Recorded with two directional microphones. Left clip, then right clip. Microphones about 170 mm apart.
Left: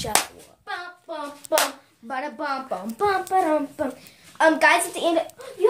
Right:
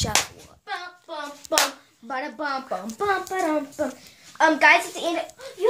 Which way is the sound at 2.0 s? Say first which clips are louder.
Even; 45° right (ahead or behind).